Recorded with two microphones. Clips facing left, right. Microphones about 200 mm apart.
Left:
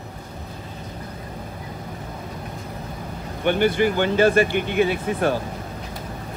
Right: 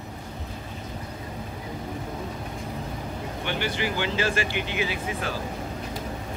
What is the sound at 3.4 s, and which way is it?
Speech, 50° left (ahead or behind).